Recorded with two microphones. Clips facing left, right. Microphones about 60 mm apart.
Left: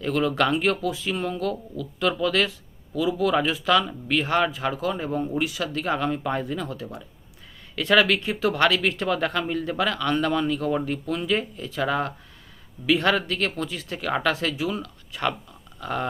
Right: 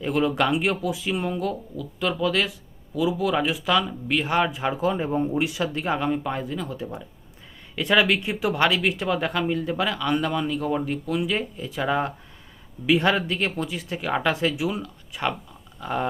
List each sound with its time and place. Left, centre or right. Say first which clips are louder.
0.0 s speech: even; centre
4.5 s speech: right 2 dB; right
6.3 s speech: left 1 dB; centre
7.8 s speech: left 1 dB; centre